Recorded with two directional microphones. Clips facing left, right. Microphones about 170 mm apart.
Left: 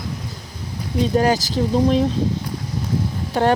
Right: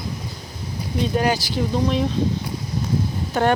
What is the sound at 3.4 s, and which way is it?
Speech, 30° left (ahead or behind).